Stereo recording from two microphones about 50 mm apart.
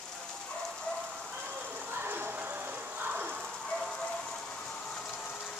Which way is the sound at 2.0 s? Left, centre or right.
Right.